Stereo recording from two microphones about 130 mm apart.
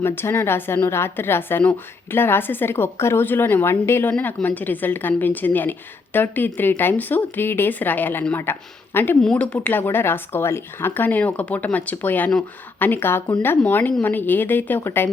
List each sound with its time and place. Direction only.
0.0 s a woman's voice: 20° left (ahead or behind)